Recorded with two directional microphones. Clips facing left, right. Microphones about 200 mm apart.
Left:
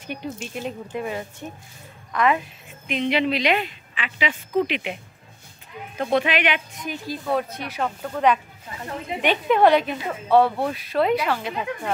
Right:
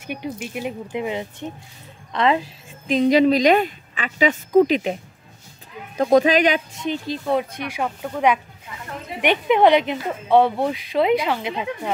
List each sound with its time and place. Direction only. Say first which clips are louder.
0.0 s a woman's voice: right 3 dB; 10° right (ahead or behind); by 4.9 s 40° right (ahead or behind)
5.9 s a woman's voice: right 7 dB; 40° right (ahead or behind)
6.8 s a woman's voice: right 5 dB; 25° right (ahead or behind)